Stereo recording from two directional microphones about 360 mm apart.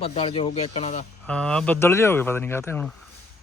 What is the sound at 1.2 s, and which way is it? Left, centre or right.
Speech, centre.